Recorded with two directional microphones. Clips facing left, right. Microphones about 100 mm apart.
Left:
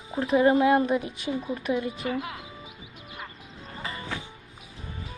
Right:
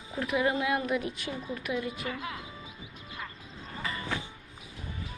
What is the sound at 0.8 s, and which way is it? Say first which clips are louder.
Speech: left 4 dB; 20° left (ahead or behind).